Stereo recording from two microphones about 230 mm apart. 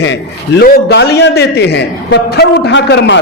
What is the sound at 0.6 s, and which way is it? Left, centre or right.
A man's voice, left.